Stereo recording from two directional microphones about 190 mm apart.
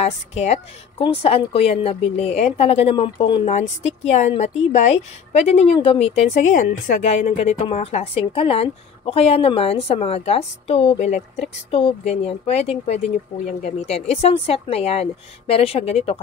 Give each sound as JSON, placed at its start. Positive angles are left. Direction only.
{"t": 0.0, "sound": "a woman's voice", "side_deg": 35}